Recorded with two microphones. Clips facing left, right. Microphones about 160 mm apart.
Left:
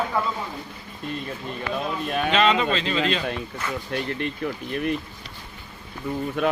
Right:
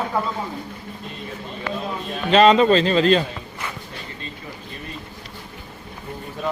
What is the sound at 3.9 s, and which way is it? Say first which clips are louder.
Speech: left 9 dB; 75° left (ahead or behind).